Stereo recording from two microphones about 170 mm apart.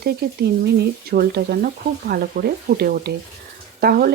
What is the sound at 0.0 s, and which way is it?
Speech, 70° right (ahead or behind).